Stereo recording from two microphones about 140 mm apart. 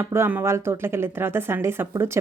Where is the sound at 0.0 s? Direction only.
20° right (ahead or behind).